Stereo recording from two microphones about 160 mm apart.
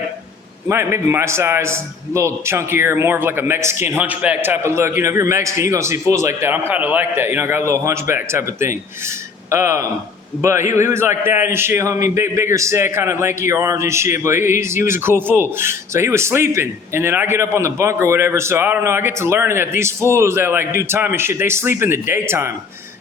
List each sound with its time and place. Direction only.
0.7 s a man's voice: 15° right (ahead or behind)